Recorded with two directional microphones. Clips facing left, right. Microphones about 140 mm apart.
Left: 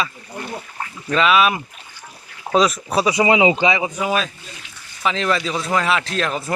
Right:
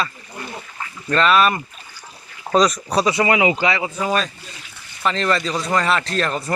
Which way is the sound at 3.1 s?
20° left (ahead or behind).